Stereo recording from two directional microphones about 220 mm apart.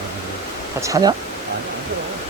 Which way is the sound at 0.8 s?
15° right (ahead or behind).